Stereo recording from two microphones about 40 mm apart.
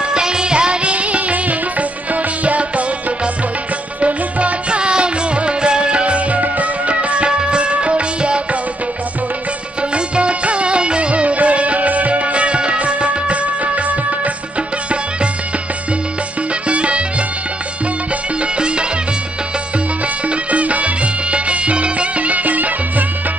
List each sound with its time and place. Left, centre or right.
0.1 s music: right
4.0 s music: right
9.8 s music: right
16.6 s music: right
18.4 s music: right
20.2 s music: right